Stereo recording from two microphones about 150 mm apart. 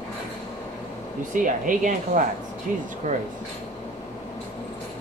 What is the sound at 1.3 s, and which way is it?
Speech, 60° right (ahead or behind).